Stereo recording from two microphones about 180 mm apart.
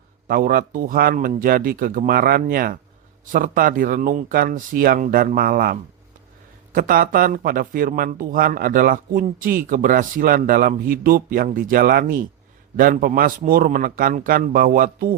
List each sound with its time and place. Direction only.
0.3 s speech: 55° right (ahead or behind)
6.7 s speech: 50° right (ahead or behind)